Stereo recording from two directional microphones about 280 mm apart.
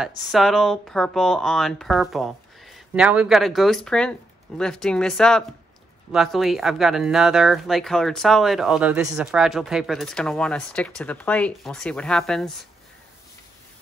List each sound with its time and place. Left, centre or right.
0.2 s speech: centre